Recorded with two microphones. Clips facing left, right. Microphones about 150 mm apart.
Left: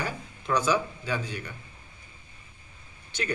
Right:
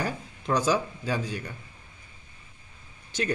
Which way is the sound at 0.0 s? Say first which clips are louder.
Right 3 dB; 40° right (ahead or behind).